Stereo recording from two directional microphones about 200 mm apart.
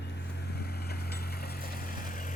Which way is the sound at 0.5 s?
50° left (ahead or behind).